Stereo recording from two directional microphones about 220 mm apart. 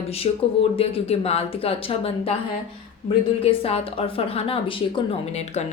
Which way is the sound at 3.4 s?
25° left (ahead or behind).